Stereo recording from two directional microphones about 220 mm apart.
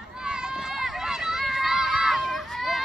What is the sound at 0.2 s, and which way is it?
Run, 5° right (ahead or behind).